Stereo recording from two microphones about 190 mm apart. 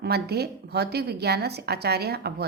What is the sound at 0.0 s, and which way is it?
A woman's voice, 60° right (ahead or behind).